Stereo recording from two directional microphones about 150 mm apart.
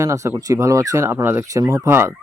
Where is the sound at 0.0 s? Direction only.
20° right (ahead or behind).